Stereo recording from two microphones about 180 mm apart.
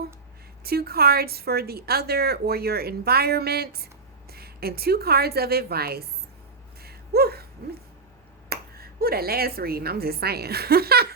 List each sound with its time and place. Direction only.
0.6 s a woman's voice: 60° right (ahead or behind)
6.8 s gasp: 60° right (ahead or behind)
8.4 s speech: 60° right (ahead or behind)